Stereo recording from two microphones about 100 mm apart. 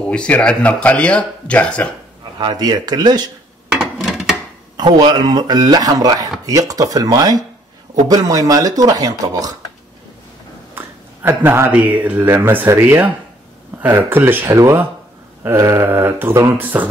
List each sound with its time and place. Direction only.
0.0 s speech: 10° left (ahead or behind)
2.3 s speech: 45° right (ahead or behind)
3.7 s a sound: 5° right (ahead or behind)
4.7 s speech: 50° right (ahead or behind)
11.2 s speech: 25° right (ahead or behind)